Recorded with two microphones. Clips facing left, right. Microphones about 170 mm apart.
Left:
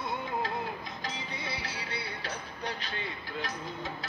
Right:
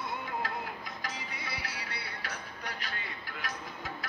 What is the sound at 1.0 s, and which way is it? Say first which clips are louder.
Music: left 3 dB; 25° left (ahead or behind).